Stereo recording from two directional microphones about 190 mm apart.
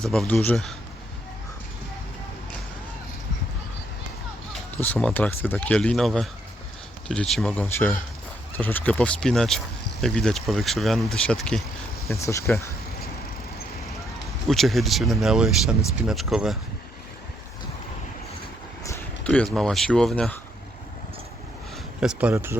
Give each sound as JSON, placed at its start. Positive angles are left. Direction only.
{"t": 0.0, "sound": "speech", "side_deg": 5}
{"t": 4.8, "sound": "speech", "side_deg": 10}
{"t": 12.1, "sound": "speech", "side_deg": 15}
{"t": 14.4, "sound": "speech", "side_deg": 0}
{"t": 18.9, "sound": "speech", "side_deg": 10}
{"t": 22.0, "sound": "speech", "side_deg": -5}